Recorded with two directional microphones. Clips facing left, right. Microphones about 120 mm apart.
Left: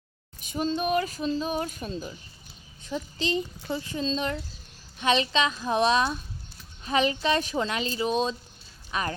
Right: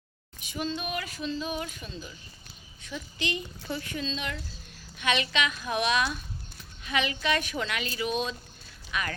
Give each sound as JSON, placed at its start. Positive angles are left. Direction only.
{"t": 0.3, "sound": "speech", "side_deg": 40}